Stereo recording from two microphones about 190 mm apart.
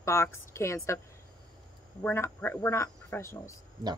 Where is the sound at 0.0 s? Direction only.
15° left (ahead or behind).